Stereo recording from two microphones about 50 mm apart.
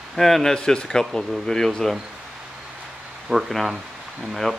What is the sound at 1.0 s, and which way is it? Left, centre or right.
Speech, centre.